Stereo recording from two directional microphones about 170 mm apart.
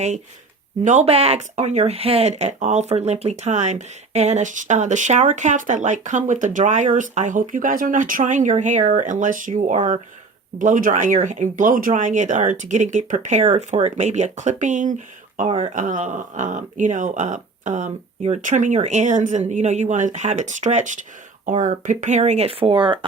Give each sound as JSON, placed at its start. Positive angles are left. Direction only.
{"t": 0.9, "sound": "speech", "side_deg": -40}